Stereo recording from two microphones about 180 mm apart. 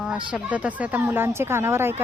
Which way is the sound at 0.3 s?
5° right (ahead or behind).